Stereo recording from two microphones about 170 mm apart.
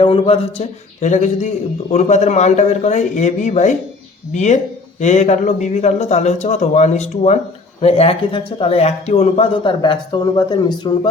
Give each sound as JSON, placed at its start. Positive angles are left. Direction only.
{"t": 0.0, "sound": "speech", "side_deg": 35}
{"t": 1.0, "sound": "speech", "side_deg": 45}